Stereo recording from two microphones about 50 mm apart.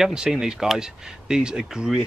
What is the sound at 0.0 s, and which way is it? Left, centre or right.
Speech, centre.